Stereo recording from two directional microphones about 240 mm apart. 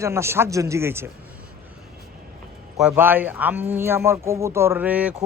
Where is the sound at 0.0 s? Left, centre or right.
Centre.